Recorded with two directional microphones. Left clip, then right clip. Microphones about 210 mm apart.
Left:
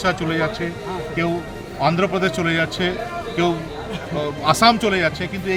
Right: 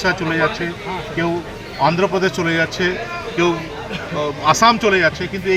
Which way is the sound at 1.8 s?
30° left (ahead or behind).